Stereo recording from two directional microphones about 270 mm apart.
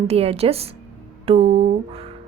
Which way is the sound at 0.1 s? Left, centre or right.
Right.